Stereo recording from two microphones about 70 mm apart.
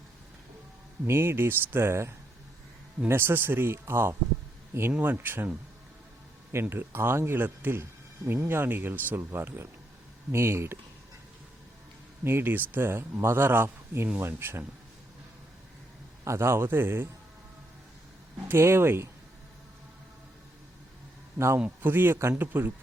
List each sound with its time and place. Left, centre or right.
1.0 s speech: right
6.5 s speech: right
12.2 s speech: right
16.2 s speech: right
18.4 s speech: right
21.3 s a man's voice: right
21.8 s speech: right